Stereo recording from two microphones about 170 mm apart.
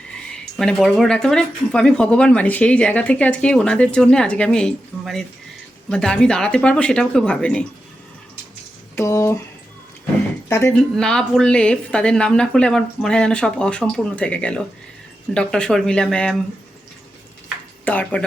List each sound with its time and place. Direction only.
0.5 s speech: 5° left (ahead or behind)
9.0 s speech: 15° left (ahead or behind)
10.5 s speech: 15° left (ahead or behind)
10.9 s speech: 5° left (ahead or behind)
17.8 s speech: 10° left (ahead or behind)